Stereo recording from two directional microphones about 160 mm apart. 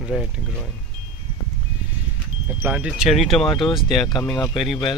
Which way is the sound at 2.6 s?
10° right (ahead or behind).